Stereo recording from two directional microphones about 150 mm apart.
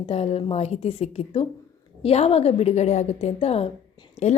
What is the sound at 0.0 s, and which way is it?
A woman's voice, 40° left (ahead or behind).